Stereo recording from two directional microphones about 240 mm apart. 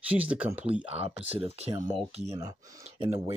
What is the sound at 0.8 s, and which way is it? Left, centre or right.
Speech, right.